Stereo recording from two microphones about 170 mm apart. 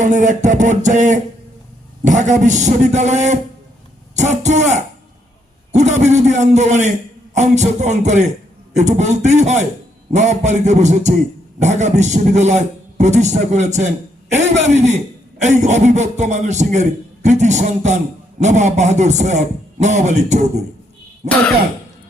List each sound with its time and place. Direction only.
0.0 s a man's voice: 45° right (ahead or behind)